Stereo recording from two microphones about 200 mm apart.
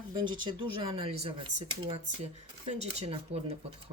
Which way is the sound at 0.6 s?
25° right (ahead or behind).